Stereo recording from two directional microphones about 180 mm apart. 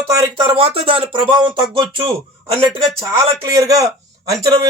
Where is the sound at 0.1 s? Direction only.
20° right (ahead or behind).